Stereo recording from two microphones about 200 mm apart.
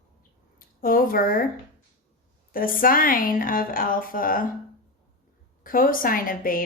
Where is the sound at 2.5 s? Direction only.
45° left (ahead or behind).